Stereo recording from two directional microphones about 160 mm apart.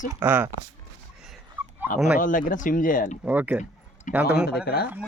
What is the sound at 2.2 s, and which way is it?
Speech, 55° left (ahead or behind).